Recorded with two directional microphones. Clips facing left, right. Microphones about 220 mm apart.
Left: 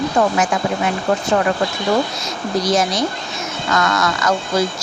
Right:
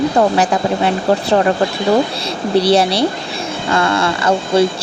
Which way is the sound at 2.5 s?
30° right (ahead or behind).